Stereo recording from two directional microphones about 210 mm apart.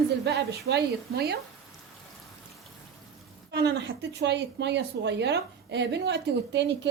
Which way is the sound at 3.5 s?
55° right (ahead or behind).